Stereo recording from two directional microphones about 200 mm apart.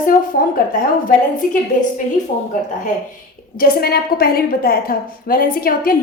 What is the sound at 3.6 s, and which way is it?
A woman's voice, 50° left (ahead or behind).